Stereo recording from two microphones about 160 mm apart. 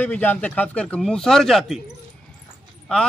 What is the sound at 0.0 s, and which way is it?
Speech, 10° left (ahead or behind).